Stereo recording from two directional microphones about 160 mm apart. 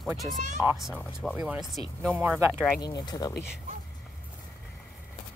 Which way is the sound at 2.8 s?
25° left (ahead or behind).